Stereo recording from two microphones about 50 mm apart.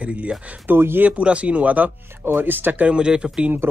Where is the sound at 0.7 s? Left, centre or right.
Right.